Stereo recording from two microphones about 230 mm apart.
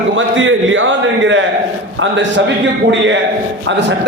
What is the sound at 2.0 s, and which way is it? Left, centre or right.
Speech, right.